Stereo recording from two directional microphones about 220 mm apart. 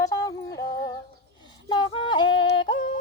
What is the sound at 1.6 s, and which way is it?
Yodeling, 20° left (ahead or behind).